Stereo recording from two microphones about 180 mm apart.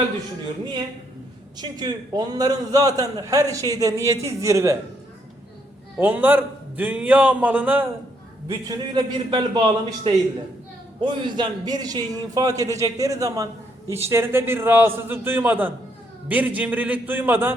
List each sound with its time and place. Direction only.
0.6 s a man's voice: 25° right (ahead or behind)
6.0 s a man's voice: 10° right (ahead or behind)
8.4 s a man's voice: 20° right (ahead or behind)